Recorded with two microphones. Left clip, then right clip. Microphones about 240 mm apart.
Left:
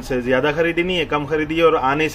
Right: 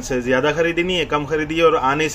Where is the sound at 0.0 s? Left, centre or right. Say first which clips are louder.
Even; centre.